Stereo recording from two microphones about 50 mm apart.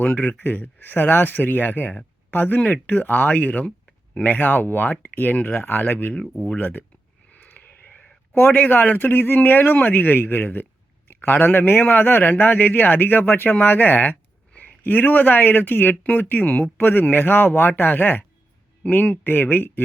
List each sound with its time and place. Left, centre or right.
0.0 s a man's voice: left
7.3 s vehicle: left
8.3 s a man's voice: left